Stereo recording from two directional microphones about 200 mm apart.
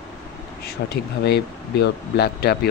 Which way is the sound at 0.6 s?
50° left (ahead or behind).